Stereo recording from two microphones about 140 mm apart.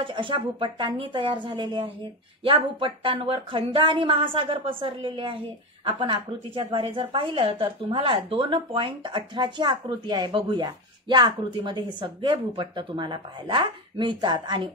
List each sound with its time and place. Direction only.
0.0 s a woman's voice: 35° right (ahead or behind)